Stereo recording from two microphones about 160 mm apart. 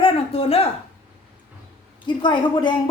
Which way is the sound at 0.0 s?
35° left (ahead or behind).